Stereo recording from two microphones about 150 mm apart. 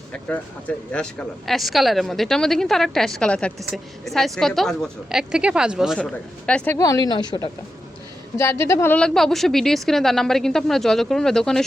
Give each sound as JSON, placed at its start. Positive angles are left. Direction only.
{"t": 0.1, "sound": "speech", "side_deg": 10}
{"t": 6.0, "sound": "speech", "side_deg": 5}
{"t": 6.7, "sound": "a woman's voice", "side_deg": 20}